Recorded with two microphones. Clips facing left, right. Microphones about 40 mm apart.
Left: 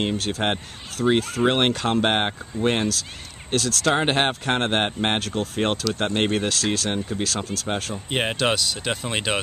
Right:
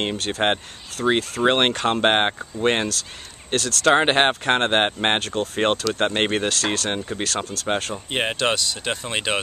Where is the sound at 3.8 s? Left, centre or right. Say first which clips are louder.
Right 5 dB; right.